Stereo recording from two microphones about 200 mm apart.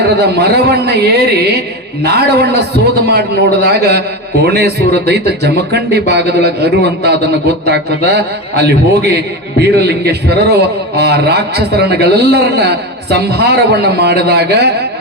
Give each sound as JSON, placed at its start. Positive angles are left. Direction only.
{"t": 0.3, "sound": "speech", "side_deg": -55}